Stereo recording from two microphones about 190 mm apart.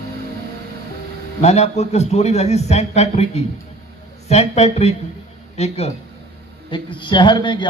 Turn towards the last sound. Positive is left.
turn(degrees=25)  # may be behind; listen again after turning